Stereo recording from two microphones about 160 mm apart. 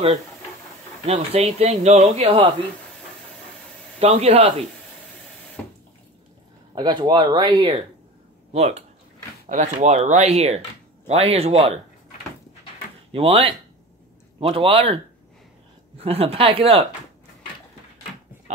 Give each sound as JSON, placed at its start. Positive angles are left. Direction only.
{"t": 1.0, "sound": "speech", "side_deg": -40}
{"t": 4.0, "sound": "speech", "side_deg": -40}
{"t": 5.6, "sound": "water", "side_deg": 10}
{"t": 6.7, "sound": "speech", "side_deg": -25}
{"t": 13.1, "sound": "speech", "side_deg": -35}
{"t": 16.0, "sound": "speech", "side_deg": -40}